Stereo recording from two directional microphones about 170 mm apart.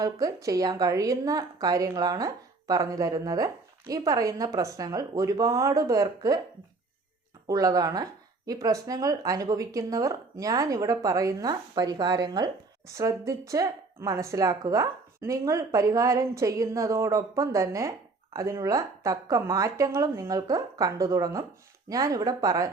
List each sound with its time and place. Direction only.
0.0 s a woman's voice: 20° right (ahead or behind)
7.4 s a woman's voice: 20° right (ahead or behind)